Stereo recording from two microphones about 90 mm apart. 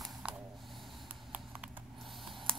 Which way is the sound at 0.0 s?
10° right (ahead or behind).